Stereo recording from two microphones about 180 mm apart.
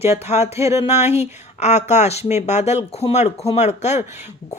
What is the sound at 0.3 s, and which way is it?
Speech, 35° left (ahead or behind).